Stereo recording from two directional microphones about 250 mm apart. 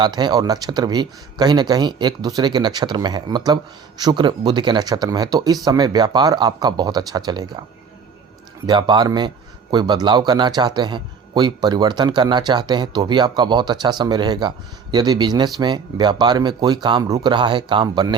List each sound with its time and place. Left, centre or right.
0.0 s a man's voice: centre
8.6 s a man's voice: centre